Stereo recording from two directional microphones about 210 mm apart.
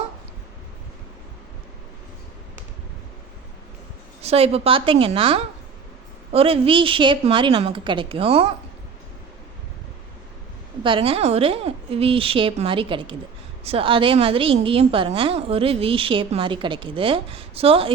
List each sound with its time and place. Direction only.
4.2 s a woman's voice: 30° right (ahead or behind)
10.8 s a woman's voice: 25° right (ahead or behind)